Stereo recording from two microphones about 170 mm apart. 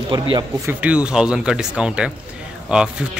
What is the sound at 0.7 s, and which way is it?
Speech, 10° right (ahead or behind).